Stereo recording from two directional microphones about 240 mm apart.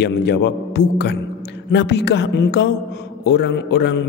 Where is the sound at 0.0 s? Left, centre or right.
Left.